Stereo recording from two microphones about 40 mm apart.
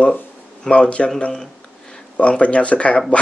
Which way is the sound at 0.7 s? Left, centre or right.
Left.